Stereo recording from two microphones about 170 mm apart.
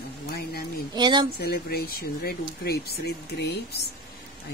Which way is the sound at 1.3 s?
65° left (ahead or behind).